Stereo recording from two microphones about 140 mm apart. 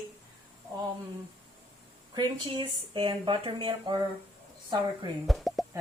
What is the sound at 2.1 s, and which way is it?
Speech, 35° right (ahead or behind).